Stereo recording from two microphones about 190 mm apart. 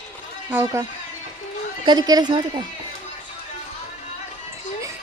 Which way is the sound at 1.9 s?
20° right (ahead or behind).